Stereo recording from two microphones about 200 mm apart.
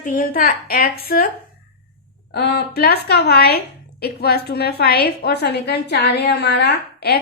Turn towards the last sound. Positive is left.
turn(degrees=55)  # may be behind; listen again after turning